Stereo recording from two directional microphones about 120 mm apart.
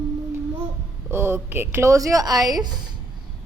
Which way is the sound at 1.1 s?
20° right (ahead or behind).